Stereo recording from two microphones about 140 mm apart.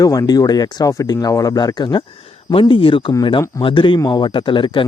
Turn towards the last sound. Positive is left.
turn(degrees=35)  # may be behind; listen again after turning